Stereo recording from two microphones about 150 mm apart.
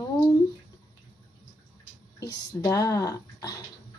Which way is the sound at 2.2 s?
25° left (ahead or behind).